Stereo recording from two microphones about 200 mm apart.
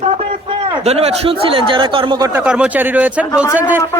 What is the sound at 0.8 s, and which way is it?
Speech, 30° right (ahead or behind).